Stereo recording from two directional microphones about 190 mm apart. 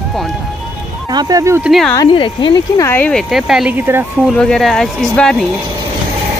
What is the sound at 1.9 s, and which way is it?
Speech, 25° left (ahead or behind).